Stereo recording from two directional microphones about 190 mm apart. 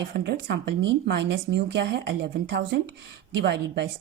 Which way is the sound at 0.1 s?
55° right (ahead or behind).